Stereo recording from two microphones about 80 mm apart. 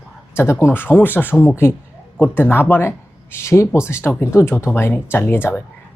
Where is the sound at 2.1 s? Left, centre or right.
Centre.